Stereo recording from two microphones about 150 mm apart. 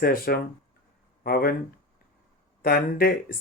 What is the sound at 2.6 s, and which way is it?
Speech, 85° left.